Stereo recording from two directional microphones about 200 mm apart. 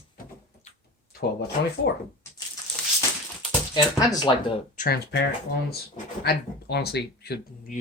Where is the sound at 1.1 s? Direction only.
50° left (ahead or behind).